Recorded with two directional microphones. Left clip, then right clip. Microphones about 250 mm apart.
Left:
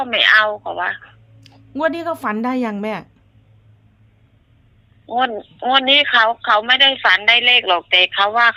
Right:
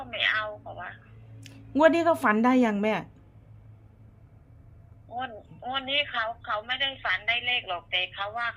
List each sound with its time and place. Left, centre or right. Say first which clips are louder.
0.0 s a woman's voice: left 14 dB; left
1.4 s speech: left 1 dB; centre
5.0 s a woman's voice: left 16 dB; left